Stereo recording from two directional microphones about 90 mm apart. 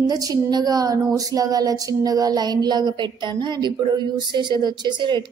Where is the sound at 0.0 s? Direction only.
45° right (ahead or behind).